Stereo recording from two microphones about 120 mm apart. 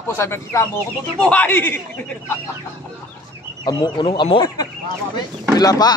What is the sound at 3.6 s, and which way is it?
Speech, 40° left (ahead or behind).